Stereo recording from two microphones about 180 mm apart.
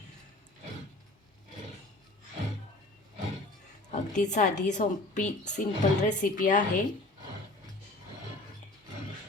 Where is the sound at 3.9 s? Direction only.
40° left (ahead or behind).